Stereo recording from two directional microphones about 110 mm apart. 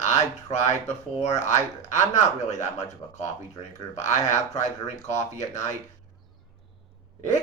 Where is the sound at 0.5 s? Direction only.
90° left.